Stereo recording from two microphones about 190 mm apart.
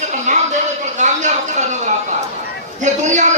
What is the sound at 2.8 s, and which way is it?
Speech, 40° right (ahead or behind).